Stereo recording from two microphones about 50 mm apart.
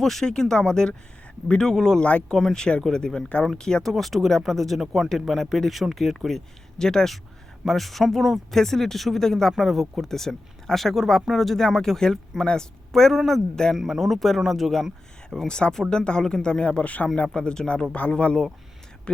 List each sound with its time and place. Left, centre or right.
0.0 s speech: centre
2.0 s speech: left
2.3 s speech: centre
3.9 s speech: centre
13.7 s speech: centre
15.4 s speech: centre
17.2 s speech: centre
17.9 s speech: left